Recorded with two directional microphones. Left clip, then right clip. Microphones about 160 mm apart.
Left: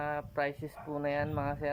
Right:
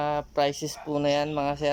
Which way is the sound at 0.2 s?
45° right (ahead or behind).